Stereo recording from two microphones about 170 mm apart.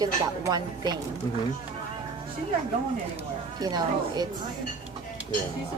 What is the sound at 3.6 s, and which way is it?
Speech, 25° right (ahead or behind).